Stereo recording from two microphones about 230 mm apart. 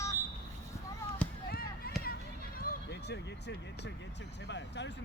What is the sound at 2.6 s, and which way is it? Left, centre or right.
Vehicle, left.